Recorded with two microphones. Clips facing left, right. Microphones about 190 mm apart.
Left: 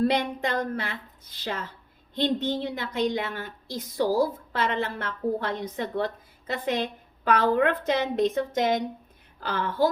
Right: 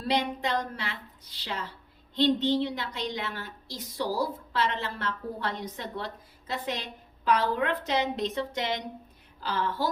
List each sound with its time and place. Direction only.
0.0 s a woman's voice: 50° left (ahead or behind)